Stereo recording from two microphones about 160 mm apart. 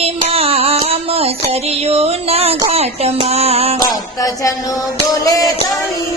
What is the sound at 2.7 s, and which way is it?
Speech, 40° right (ahead or behind).